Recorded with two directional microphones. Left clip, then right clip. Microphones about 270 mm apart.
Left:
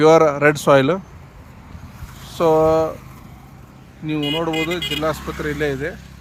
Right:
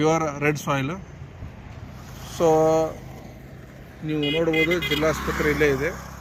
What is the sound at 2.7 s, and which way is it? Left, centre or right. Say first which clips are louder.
Speech: left 4 dB; centre.